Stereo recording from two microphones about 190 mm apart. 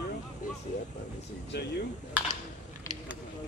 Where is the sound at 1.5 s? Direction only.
60° left (ahead or behind).